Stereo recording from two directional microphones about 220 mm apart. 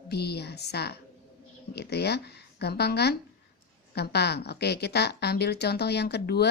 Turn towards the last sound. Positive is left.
turn(degrees=45)  # may be behind; listen again after turning